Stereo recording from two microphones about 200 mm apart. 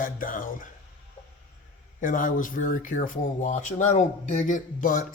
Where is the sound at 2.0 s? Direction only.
40° left (ahead or behind).